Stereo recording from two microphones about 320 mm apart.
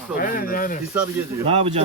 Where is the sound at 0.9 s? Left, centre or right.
Centre.